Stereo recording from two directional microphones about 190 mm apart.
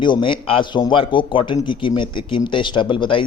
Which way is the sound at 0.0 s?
25° left (ahead or behind).